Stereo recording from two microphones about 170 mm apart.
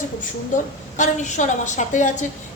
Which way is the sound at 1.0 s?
45° left (ahead or behind).